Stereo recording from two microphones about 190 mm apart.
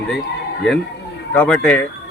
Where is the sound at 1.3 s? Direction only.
5° left (ahead or behind).